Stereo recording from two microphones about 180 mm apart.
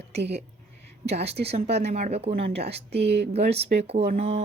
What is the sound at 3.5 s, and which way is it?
Speech, 35° right (ahead or behind).